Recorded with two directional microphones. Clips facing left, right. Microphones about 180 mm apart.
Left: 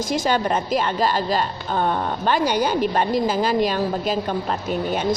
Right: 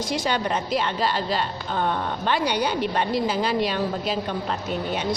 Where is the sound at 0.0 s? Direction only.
45° left (ahead or behind).